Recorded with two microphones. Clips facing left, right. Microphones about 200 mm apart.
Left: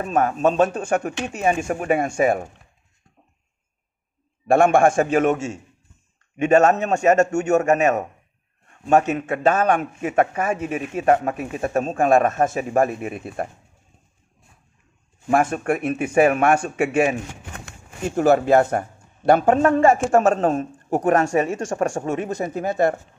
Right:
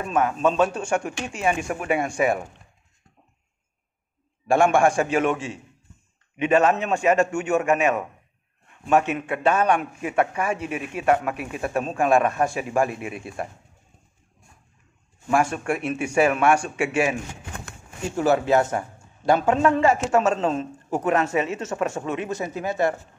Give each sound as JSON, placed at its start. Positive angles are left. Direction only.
{"t": 0.0, "sound": "a man's voice", "side_deg": 40}
{"t": 1.2, "sound": "a man's voice", "side_deg": 40}
{"t": 4.7, "sound": "a man's voice", "side_deg": 50}
{"t": 15.5, "sound": "a man's voice", "side_deg": 50}
{"t": 18.1, "sound": "a man's voice", "side_deg": 50}